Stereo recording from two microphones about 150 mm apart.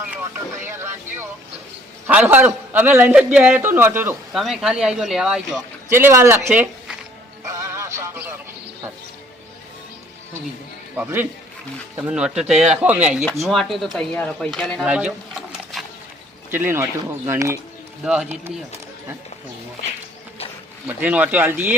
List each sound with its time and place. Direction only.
0.1 s vehicle: 15° right (ahead or behind)
2.0 s a man's voice: 10° right (ahead or behind)
4.3 s speech: centre (ahead or behind)
5.9 s a man's voice: 15° right (ahead or behind)
7.4 s music: 20° right (ahead or behind)
10.9 s a man's voice: 15° right (ahead or behind)
13.4 s speech: centre (ahead or behind)
14.8 s a sound: 5° right (ahead or behind)
16.5 s a man's voice: 15° right (ahead or behind)
18.0 s a man's voice: 5° right (ahead or behind)
20.8 s a man's voice: 10° right (ahead or behind)